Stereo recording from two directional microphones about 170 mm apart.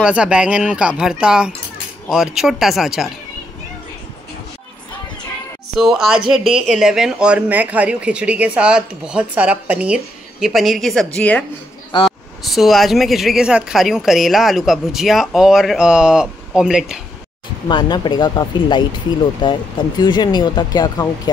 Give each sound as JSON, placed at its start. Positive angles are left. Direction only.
{"t": 0.0, "sound": "a woman's voice", "side_deg": -5}
{"t": 5.8, "sound": "a woman's voice", "side_deg": 0}
{"t": 12.4, "sound": "a woman's voice", "side_deg": 0}
{"t": 17.6, "sound": "speech", "side_deg": 25}